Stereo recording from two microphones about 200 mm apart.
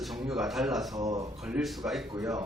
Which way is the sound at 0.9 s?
20° right (ahead or behind).